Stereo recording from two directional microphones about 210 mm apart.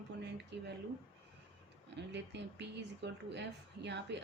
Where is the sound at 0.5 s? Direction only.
55° right (ahead or behind).